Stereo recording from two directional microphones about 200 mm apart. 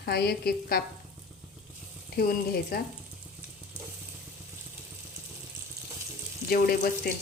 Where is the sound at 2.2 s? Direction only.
50° left (ahead or behind).